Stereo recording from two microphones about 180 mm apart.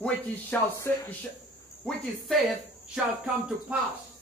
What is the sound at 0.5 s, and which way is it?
Speech, 10° left (ahead or behind).